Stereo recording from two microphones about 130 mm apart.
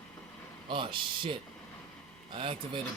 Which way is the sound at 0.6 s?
40° right (ahead or behind).